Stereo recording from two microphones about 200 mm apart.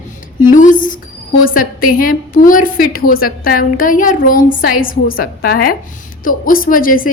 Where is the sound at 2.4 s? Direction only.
45° left (ahead or behind).